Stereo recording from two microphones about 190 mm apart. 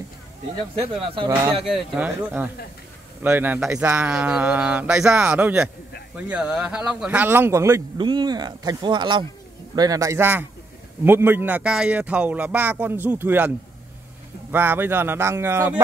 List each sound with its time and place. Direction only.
0.7 s speech: 30° right (ahead or behind)
1.6 s a man's voice: centre (ahead or behind)
14.5 s a man's voice: 10° right (ahead or behind)